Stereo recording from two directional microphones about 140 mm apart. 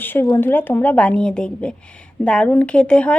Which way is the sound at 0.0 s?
15° left (ahead or behind).